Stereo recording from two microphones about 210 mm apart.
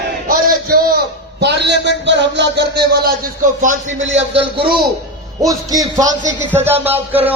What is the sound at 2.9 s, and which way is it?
A man's voice, 45° right (ahead or behind).